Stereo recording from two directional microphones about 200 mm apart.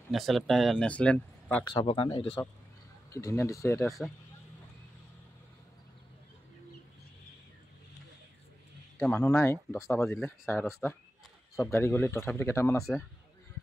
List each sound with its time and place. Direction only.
0.1 s speech: centre (ahead or behind)
1.6 s speech: 20° left (ahead or behind)
3.1 s speech: 15° left (ahead or behind)
9.0 s speech: 10° left (ahead or behind)